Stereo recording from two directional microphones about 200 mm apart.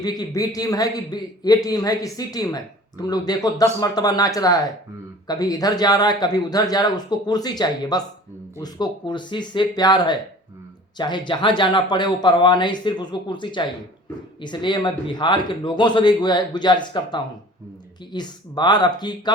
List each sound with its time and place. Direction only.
0.0 s a man's voice: 20° left (ahead or behind)